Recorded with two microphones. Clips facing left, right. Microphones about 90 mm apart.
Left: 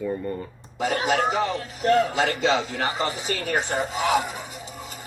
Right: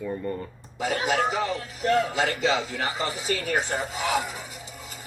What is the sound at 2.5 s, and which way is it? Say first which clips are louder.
Speech: left 3 dB; 20° left (ahead or behind).